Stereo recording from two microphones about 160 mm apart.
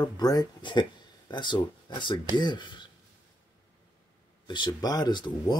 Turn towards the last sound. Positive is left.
turn(degrees=25)  # may be behind; listen again after turning